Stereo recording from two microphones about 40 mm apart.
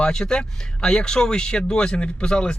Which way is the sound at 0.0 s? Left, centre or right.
Centre.